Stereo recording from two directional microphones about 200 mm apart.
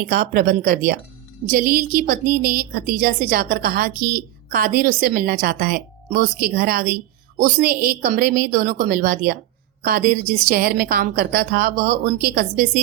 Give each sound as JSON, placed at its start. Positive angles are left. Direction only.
{"t": 0.0, "sound": "a woman's voice", "side_deg": -45}